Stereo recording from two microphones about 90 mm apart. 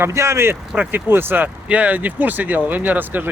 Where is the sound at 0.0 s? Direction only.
30° right (ahead or behind).